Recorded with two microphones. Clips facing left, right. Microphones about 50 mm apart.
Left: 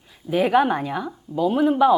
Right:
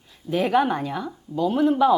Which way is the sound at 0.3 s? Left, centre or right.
Centre.